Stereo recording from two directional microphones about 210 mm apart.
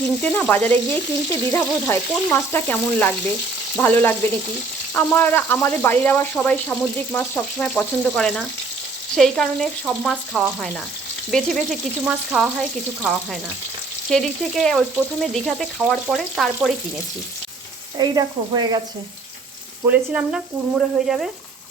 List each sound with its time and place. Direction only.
0.2 s frying: 5° left (ahead or behind)
1.5 s speech: 10° left (ahead or behind)
7.8 s frying: 5° left (ahead or behind)
17.9 s speech: 20° right (ahead or behind)
19.9 s frying: 5° right (ahead or behind)